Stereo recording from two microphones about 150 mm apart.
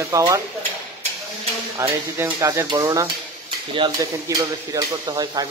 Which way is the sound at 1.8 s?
15° right (ahead or behind).